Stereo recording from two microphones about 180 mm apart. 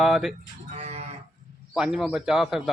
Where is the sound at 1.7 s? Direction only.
5° right (ahead or behind).